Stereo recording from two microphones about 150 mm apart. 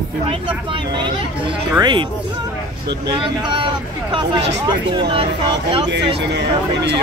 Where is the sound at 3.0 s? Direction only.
35° right (ahead or behind).